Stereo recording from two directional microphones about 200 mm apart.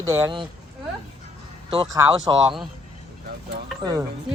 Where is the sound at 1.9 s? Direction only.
20° right (ahead or behind).